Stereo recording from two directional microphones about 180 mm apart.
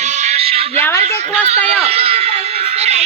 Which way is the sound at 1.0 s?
35° right (ahead or behind).